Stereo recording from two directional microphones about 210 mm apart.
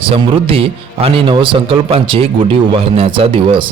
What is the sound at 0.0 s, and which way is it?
Speech, 25° right (ahead or behind).